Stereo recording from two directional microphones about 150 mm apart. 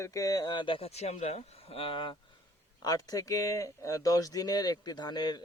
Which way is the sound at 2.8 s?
25° left (ahead or behind).